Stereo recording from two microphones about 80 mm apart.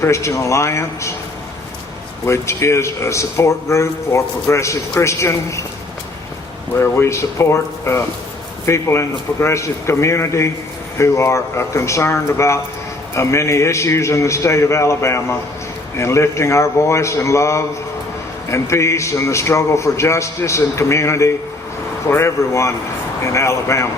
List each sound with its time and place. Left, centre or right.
0.0 s speech: left
2.2 s speech: left
6.7 s speech: left